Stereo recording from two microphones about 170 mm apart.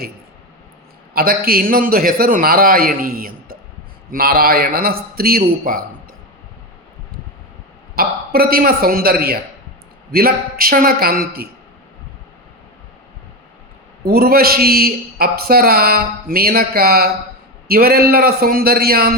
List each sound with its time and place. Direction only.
1.1 s a man's voice: 60° right (ahead or behind)
7.9 s a man's voice: 60° right (ahead or behind)
14.0 s a man's voice: 65° right (ahead or behind)